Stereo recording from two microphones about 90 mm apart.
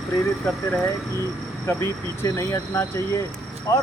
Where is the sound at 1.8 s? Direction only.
35° left (ahead or behind).